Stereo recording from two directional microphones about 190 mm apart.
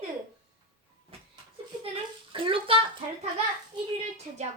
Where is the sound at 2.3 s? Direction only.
25° right (ahead or behind).